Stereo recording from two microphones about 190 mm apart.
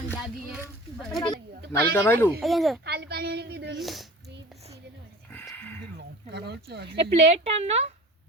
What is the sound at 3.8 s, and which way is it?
Speech, centre (ahead or behind).